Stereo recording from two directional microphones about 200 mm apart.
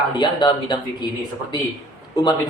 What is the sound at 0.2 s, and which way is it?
Speech, 20° left (ahead or behind).